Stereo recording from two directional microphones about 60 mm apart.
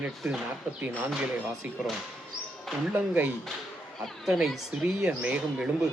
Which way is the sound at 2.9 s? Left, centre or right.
Right.